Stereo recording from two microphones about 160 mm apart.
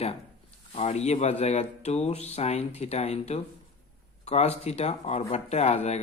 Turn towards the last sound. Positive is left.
turn(degrees=40)  # may be behind; listen again after turning